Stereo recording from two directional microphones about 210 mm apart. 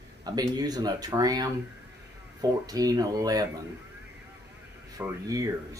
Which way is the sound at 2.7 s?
15° right (ahead or behind).